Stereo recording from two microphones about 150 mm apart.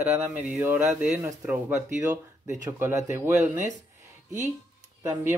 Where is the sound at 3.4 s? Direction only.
55° right (ahead or behind).